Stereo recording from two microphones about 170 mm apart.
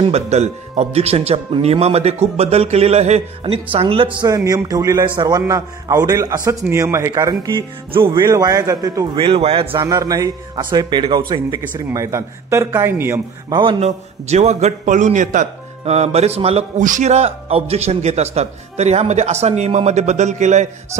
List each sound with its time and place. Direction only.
0.0 s a man's voice: 40° right (ahead or behind)
4.5 s a man's voice: 20° right (ahead or behind)
9.8 s a man's voice: 20° right (ahead or behind)
13.5 s a man's voice: 30° right (ahead or behind)